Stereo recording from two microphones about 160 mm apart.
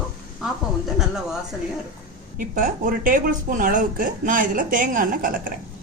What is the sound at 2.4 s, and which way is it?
Speech, 55° right (ahead or behind).